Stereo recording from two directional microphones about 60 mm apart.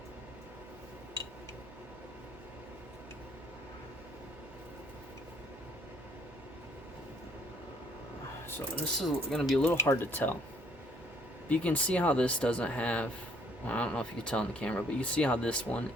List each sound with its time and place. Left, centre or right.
9.0 s speech: centre
9.8 s speech: left
11.4 s speech: left